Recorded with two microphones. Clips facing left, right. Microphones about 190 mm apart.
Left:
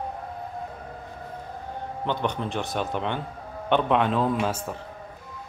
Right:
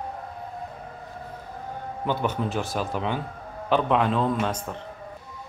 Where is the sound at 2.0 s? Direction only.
5° right (ahead or behind).